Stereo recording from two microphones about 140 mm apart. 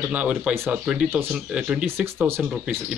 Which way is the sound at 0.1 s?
10° right (ahead or behind).